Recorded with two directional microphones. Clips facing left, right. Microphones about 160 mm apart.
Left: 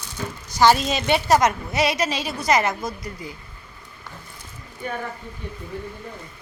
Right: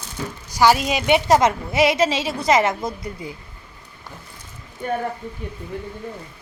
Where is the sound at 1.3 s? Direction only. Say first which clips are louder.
Right 2 dB; 25° right (ahead or behind).